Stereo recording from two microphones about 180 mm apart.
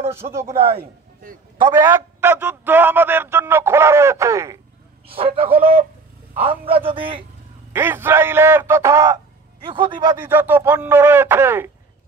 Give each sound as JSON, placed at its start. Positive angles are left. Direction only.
{"t": 0.1, "sound": "a man's voice", "side_deg": -15}
{"t": 1.6, "sound": "a man's voice", "side_deg": -15}
{"t": 5.0, "sound": "a man's voice", "side_deg": -30}
{"t": 6.9, "sound": "speech", "side_deg": -30}
{"t": 7.7, "sound": "a man's voice", "side_deg": -10}
{"t": 10.2, "sound": "a man's voice", "side_deg": -10}